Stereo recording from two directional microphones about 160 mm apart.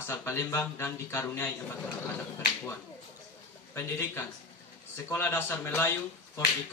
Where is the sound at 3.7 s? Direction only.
15° left (ahead or behind).